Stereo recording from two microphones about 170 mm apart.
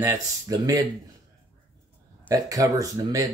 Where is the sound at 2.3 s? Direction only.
20° right (ahead or behind).